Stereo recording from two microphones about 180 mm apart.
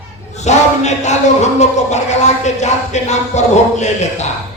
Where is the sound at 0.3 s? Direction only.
40° left (ahead or behind).